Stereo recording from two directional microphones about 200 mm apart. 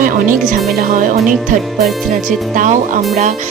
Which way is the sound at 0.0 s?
45° right (ahead or behind).